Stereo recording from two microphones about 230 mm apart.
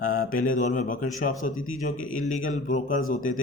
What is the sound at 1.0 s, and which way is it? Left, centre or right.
Mantra, left.